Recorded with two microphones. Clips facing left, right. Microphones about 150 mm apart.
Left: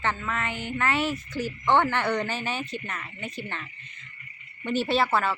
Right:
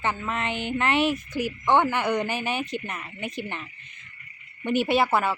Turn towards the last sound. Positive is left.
turn(degrees=-15)  # may be behind; listen again after turning